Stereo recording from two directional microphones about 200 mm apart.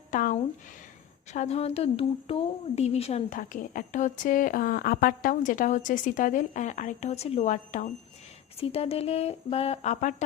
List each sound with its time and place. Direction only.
0.1 s a woman's voice: 40° left (ahead or behind)